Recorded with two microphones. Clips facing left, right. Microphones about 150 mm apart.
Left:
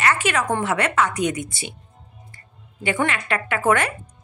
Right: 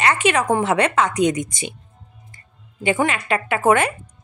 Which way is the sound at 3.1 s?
20° right (ahead or behind).